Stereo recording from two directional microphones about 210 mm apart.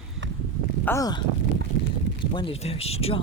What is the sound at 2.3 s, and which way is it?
Speech, 25° left (ahead or behind).